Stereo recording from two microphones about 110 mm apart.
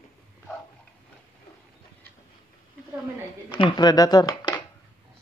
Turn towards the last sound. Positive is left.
turn(degrees=35)  # may be behind; listen again after turning